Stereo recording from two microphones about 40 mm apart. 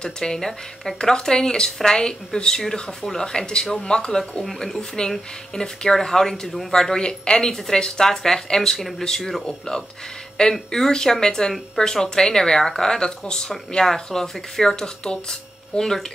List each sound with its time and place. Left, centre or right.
0.0 s speech: centre